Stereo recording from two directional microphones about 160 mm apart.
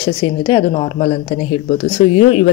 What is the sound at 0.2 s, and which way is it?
Speech, 30° left (ahead or behind).